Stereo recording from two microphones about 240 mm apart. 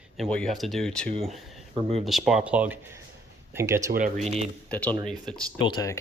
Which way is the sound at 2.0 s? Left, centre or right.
Centre.